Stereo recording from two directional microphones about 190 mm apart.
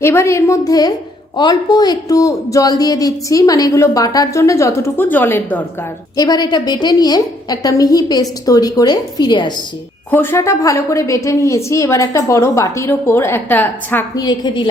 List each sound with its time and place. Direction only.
0.0 s a woman's voice: 15° left (ahead or behind)
10.1 s speech: 10° left (ahead or behind)
14.3 s a woman's voice: 25° left (ahead or behind)